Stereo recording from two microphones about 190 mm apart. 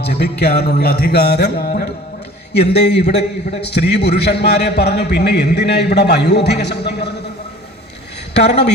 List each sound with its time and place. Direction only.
0.0 s a man's voice: 60° left (ahead or behind)
2.5 s a man's voice: 60° left (ahead or behind)
8.3 s speech: 60° left (ahead or behind)